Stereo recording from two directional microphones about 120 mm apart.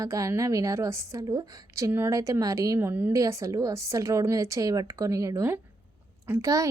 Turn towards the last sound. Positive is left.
turn(degrees=-25)  # may be behind; listen again after turning